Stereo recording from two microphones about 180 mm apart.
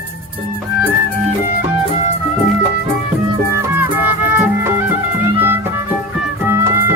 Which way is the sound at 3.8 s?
10° right (ahead or behind).